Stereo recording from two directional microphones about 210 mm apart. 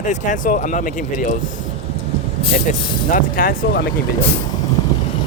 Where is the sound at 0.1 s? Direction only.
40° left (ahead or behind).